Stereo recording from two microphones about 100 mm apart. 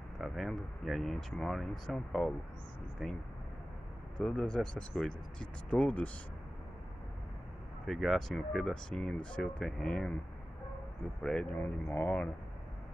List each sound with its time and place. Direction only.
0.2 s speech: centre (ahead or behind)
4.2 s speech: 5° left (ahead or behind)
7.8 s speech: centre (ahead or behind)
11.2 s speech: 10° left (ahead or behind)